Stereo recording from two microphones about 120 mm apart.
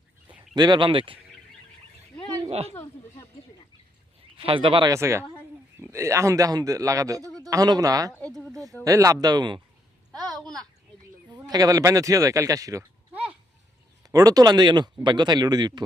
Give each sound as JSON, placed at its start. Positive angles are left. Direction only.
{"t": 0.5, "sound": "speech", "side_deg": -35}
{"t": 2.5, "sound": "speech", "side_deg": -60}
{"t": 4.4, "sound": "speech", "side_deg": -50}
{"t": 4.9, "sound": "a man's voice", "side_deg": -25}
{"t": 10.1, "sound": "a sound", "side_deg": 5}
{"t": 10.4, "sound": "a man's voice", "side_deg": -35}
{"t": 14.0, "sound": "speech", "side_deg": -30}